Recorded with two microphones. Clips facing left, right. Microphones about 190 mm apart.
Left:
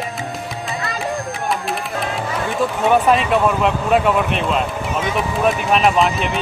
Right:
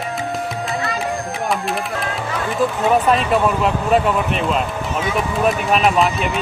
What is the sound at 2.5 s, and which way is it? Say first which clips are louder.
Speech: even; centre (ahead or behind).